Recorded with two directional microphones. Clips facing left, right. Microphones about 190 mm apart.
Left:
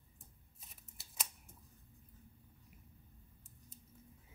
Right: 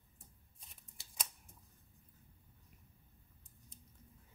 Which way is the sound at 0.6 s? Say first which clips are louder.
Left 1 dB; 5° left (ahead or behind).